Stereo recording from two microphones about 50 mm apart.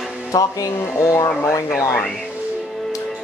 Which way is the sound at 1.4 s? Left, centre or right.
Left.